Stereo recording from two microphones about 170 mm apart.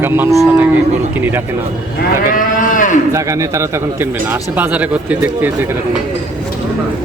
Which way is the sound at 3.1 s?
15° right (ahead or behind).